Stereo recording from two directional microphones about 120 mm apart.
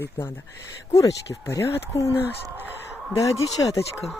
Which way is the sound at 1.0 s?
25° left (ahead or behind).